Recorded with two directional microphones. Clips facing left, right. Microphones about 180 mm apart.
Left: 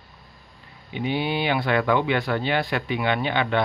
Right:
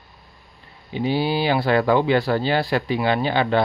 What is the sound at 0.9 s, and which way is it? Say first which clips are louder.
Speech: right 4 dB; 35° right (ahead or behind).